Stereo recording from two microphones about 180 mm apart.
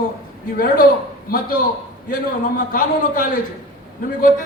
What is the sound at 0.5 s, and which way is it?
Speech, 50° left (ahead or behind).